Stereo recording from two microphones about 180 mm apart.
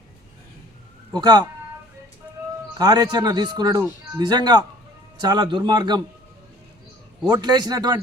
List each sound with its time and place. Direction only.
1.1 s speech: 25° right (ahead or behind)
2.7 s speech: 20° right (ahead or behind)
7.3 s speech: 20° right (ahead or behind)